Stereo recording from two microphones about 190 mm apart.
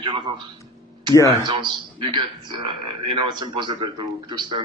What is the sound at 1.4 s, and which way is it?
A man's voice, 25° right (ahead or behind).